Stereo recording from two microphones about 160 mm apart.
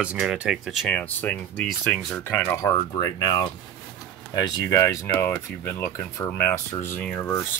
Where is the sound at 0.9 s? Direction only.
10° left (ahead or behind).